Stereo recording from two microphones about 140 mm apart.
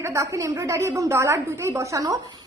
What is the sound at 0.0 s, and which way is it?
A woman's voice, 20° right (ahead or behind).